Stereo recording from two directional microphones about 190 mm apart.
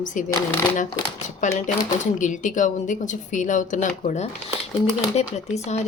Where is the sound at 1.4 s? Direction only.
40° left (ahead or behind).